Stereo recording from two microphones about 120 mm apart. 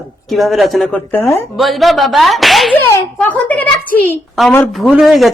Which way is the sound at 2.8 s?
15° left (ahead or behind).